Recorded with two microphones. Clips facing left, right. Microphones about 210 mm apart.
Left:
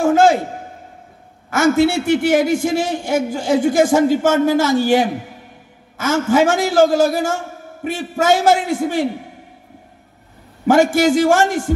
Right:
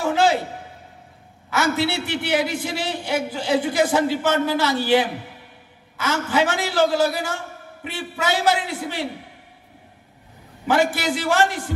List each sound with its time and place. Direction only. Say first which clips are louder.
0.0 s a sound: left 6 dB; 45° left (ahead or behind)
1.5 s a man's voice: left 8 dB; 45° left (ahead or behind)
10.7 s a man's voice: left 8 dB; 45° left (ahead or behind)